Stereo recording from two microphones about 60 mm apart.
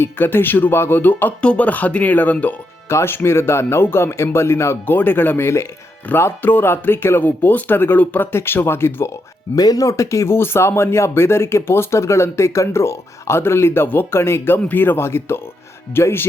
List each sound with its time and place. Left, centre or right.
0.0 s speech: left
1.4 s speech: left
2.9 s speech: left
4.9 s speech: left
9.6 s speech: left
9.9 s speech: left
10.3 s speech: left